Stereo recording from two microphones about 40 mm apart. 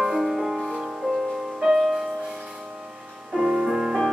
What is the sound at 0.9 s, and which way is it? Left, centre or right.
Music, centre.